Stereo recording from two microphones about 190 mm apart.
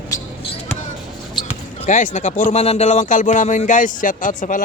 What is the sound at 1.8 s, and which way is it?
A man's voice, 45° left (ahead or behind).